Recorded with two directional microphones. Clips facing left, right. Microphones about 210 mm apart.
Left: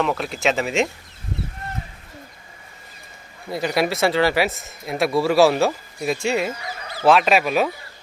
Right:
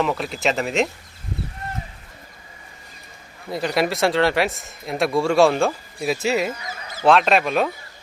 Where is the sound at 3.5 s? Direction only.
Centre (ahead or behind).